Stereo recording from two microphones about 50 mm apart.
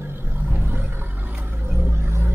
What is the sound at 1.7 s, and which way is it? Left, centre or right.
Vehicle, right.